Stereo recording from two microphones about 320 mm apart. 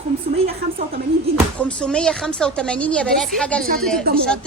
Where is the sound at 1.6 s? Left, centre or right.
Centre.